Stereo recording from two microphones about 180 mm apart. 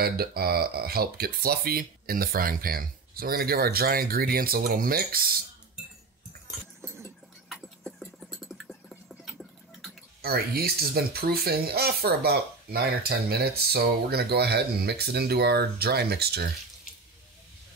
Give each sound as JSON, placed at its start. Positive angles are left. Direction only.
{"t": 0.0, "sound": "speech", "side_deg": -60}
{"t": 7.4, "sound": "a sound", "side_deg": 0}
{"t": 10.2, "sound": "speech", "side_deg": -60}